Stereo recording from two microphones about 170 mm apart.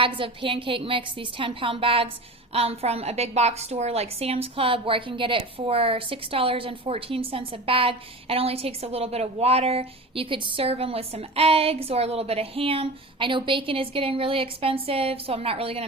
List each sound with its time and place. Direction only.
0.2 s a woman's voice: 30° right (ahead or behind)